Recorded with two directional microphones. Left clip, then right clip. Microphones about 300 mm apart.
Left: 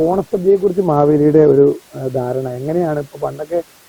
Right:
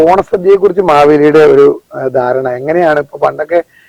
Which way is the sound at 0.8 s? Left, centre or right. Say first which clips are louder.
Right 8 dB; centre.